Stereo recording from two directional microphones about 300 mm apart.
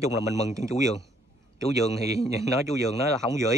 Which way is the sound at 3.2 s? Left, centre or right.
Centre.